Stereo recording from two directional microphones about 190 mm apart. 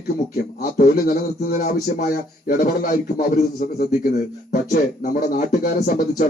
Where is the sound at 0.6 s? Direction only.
45° left (ahead or behind).